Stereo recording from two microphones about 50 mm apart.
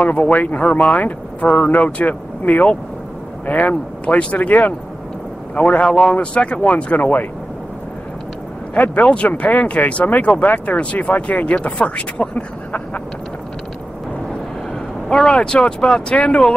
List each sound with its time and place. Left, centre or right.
0.0 s speech: left
5.9 s speech: centre
6.1 s speech: left
8.7 s speech: left
15.0 s speech: centre